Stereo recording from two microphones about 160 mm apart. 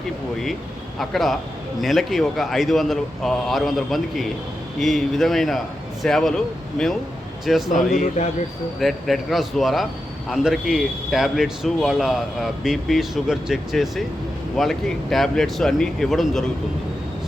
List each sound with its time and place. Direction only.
0.9 s speech: centre (ahead or behind)
7.9 s speech: 45° left (ahead or behind)
8.8 s speech: centre (ahead or behind)